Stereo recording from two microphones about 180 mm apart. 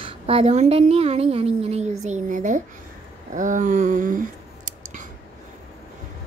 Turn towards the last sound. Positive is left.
turn(degrees=-45)  # may be behind; listen again after turning